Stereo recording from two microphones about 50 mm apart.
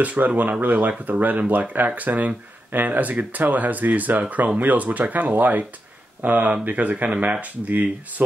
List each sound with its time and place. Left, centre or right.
0.0 s speech: right